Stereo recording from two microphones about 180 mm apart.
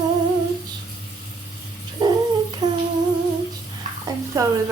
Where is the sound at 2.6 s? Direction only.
20° right (ahead or behind).